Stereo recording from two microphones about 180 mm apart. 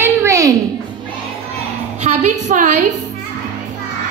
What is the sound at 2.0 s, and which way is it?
Speech, 40° right (ahead or behind).